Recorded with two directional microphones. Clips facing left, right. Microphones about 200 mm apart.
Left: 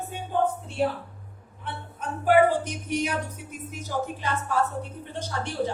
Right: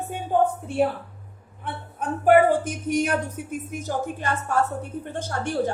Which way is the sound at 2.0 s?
50° right (ahead or behind).